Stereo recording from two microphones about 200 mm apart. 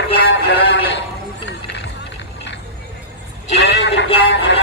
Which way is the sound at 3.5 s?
60° left (ahead or behind).